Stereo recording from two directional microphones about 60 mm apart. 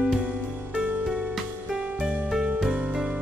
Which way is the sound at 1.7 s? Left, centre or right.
Centre.